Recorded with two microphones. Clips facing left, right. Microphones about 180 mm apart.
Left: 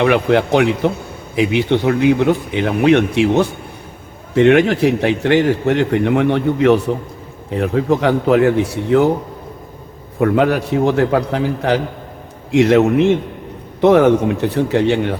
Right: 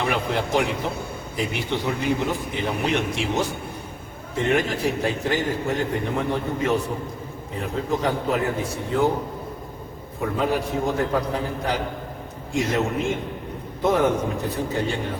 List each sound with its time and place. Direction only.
0.0 s a man's voice: 75° left (ahead or behind)
4.4 s a man's voice: 75° left (ahead or behind)
10.2 s a man's voice: 75° left (ahead or behind)